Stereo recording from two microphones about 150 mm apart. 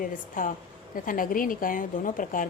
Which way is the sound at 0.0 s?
65° left (ahead or behind).